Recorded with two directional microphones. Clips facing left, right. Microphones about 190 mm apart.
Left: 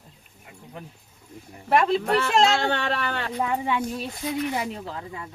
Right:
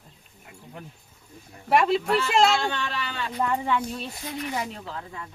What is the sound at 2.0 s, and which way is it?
Speech, 60° left (ahead or behind).